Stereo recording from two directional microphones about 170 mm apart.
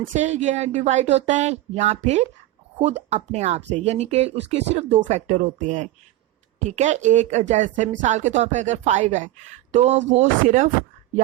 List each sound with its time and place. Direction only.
0.1 s a woman's voice: 45° right (ahead or behind)